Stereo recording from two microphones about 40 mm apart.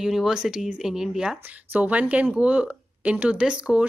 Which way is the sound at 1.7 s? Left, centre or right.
Right.